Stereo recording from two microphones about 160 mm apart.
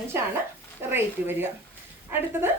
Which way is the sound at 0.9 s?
15° right (ahead or behind).